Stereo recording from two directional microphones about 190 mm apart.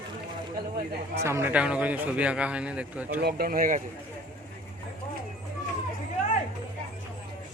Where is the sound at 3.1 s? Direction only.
55° right (ahead or behind).